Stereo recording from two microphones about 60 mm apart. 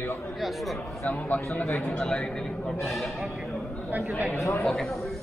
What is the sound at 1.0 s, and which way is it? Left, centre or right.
Speech, left.